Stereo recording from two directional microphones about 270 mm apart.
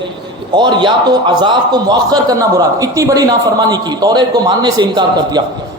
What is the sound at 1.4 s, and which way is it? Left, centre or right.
A man's voice, centre.